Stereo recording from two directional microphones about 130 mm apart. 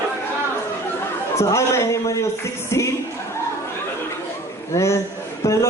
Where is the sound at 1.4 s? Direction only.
20° left (ahead or behind).